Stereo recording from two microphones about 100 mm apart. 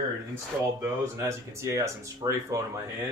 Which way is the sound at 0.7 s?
25° right (ahead or behind).